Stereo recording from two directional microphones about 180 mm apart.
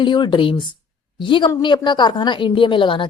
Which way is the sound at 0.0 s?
25° left (ahead or behind).